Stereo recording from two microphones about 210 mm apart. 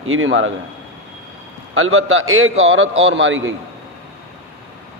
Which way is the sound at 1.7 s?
75° right (ahead or behind).